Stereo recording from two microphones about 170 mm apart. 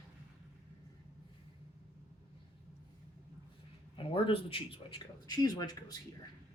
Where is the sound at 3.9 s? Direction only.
30° left (ahead or behind).